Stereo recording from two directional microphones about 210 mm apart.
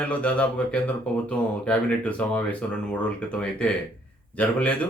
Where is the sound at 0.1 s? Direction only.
5° left (ahead or behind).